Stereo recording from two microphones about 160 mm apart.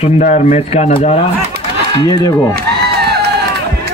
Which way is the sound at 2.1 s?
25° left (ahead or behind).